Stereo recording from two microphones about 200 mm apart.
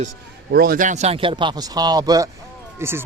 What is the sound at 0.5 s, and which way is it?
Speech, 50° right (ahead or behind).